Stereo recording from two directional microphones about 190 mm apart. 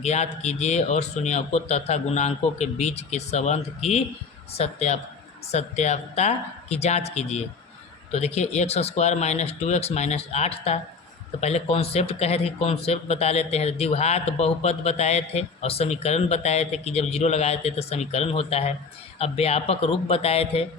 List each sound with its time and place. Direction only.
0.0 s speech: 35° left (ahead or behind)